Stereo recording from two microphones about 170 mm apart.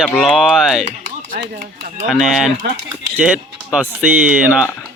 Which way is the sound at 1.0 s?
60° right (ahead or behind).